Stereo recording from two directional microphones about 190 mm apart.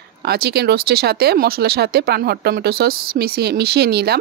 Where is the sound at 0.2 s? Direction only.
55° right (ahead or behind).